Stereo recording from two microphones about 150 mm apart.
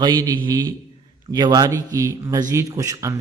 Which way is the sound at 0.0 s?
25° right (ahead or behind).